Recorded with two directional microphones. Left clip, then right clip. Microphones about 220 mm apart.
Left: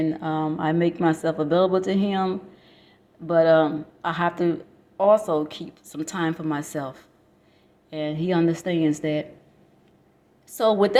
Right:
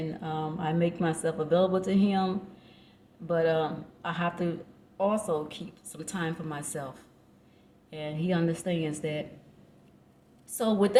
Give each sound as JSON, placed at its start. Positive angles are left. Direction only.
{"t": 0.1, "sound": "speech", "side_deg": 30}
{"t": 10.5, "sound": "speech", "side_deg": 25}